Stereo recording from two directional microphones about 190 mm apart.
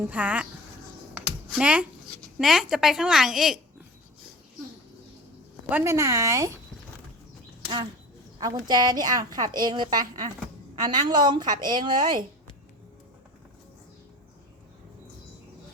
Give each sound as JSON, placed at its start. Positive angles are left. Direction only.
{"t": 0.1, "sound": "speech", "side_deg": -5}
{"t": 1.1, "sound": "a sound", "side_deg": -5}
{"t": 2.4, "sound": "a woman's voice", "side_deg": 0}
{"t": 5.6, "sound": "speech", "side_deg": -10}
{"t": 8.4, "sound": "a woman's voice", "side_deg": -20}